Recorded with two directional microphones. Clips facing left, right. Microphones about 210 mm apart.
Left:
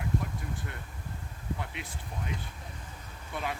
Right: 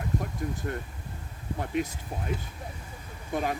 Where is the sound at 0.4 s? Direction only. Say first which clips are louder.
Right 8 dB; 45° right (ahead or behind).